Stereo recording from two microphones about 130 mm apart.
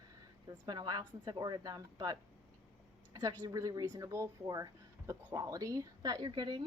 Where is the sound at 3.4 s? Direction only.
25° right (ahead or behind).